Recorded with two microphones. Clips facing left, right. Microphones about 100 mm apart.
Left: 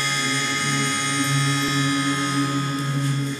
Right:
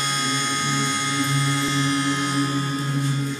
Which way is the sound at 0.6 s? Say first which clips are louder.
Even; 10° right (ahead or behind).